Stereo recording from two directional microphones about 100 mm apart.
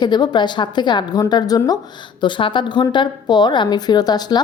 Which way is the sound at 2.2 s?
55° left (ahead or behind).